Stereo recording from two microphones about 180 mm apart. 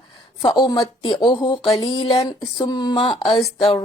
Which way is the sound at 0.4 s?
25° left (ahead or behind).